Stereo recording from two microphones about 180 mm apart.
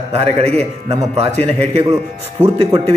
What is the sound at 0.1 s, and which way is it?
A man's voice, 35° right (ahead or behind).